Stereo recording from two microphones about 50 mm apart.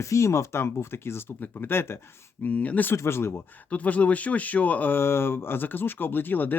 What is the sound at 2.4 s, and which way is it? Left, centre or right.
Speech, left.